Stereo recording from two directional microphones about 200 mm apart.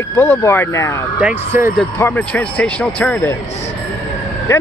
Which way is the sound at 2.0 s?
10° left (ahead or behind).